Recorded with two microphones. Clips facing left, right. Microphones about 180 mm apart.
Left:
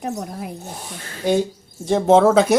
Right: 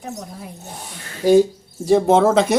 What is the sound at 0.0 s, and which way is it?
Speech, 65° left (ahead or behind).